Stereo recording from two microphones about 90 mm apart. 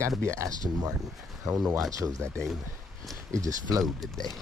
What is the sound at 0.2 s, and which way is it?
Speech, 35° right (ahead or behind).